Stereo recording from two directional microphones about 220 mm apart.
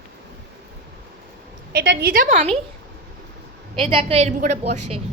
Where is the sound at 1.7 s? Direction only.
45° right (ahead or behind).